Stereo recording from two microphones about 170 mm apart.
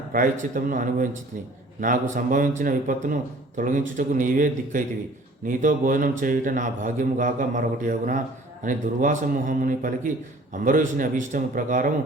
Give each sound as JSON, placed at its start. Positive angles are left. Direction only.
{"t": 0.1, "sound": "a man's voice", "side_deg": -50}